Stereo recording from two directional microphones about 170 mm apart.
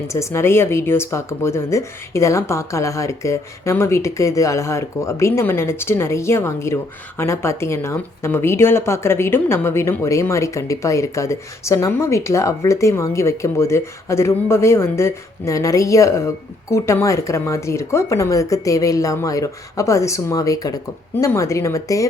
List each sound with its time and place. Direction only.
0.1 s speech: 15° left (ahead or behind)